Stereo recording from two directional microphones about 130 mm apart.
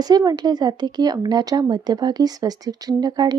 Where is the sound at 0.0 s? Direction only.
30° right (ahead or behind).